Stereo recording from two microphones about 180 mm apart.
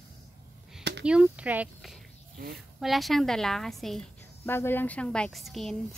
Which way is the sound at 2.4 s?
55° right (ahead or behind).